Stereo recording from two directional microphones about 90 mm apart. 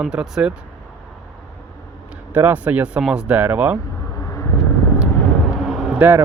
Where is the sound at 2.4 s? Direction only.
20° right (ahead or behind).